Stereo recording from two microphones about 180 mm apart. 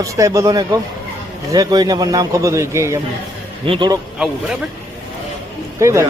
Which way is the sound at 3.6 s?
25° right (ahead or behind).